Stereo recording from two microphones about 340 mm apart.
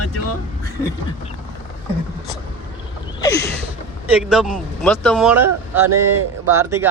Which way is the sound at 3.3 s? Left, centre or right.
Centre.